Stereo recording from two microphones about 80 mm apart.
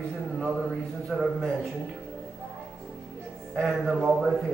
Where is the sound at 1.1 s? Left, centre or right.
Centre.